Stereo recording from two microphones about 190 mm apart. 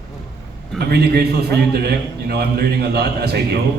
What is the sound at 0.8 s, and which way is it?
A man's voice, 55° right (ahead or behind).